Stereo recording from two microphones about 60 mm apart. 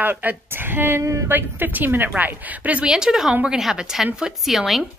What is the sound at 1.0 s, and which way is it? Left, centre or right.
Speech, right.